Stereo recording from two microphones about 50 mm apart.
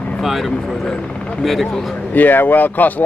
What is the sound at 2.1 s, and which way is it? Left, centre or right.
Speech, left.